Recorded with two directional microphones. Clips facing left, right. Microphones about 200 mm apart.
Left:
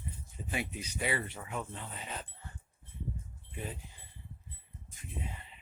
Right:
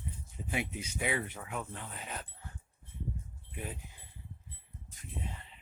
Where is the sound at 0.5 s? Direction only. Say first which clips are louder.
Right 1 dB; 20° right (ahead or behind).